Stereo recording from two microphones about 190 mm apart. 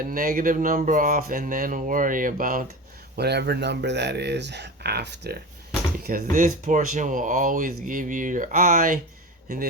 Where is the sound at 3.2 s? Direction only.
60° right (ahead or behind).